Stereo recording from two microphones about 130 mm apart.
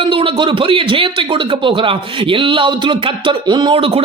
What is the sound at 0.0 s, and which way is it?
Speech, 40° right (ahead or behind).